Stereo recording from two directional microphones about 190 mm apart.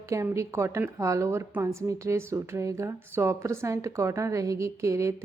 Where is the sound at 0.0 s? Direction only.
15° right (ahead or behind).